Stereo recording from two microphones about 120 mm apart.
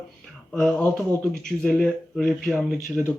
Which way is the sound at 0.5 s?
10° left (ahead or behind).